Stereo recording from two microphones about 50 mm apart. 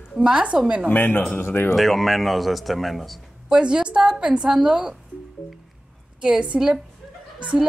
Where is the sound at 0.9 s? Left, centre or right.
Left.